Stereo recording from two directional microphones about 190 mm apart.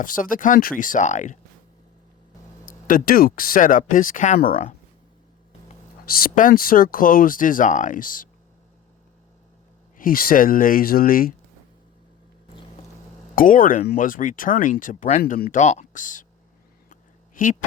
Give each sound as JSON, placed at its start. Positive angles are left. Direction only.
{"t": 0.0, "sound": "speech", "side_deg": 45}
{"t": 2.6, "sound": "speech", "side_deg": 45}
{"t": 6.1, "sound": "speech", "side_deg": 50}
{"t": 10.0, "sound": "speech", "side_deg": 50}
{"t": 13.3, "sound": "speech", "side_deg": 45}
{"t": 16.9, "sound": "a sound", "side_deg": 45}